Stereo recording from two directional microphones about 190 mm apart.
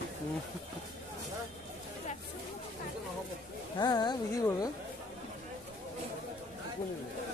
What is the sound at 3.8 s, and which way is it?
Speech, 20° left (ahead or behind).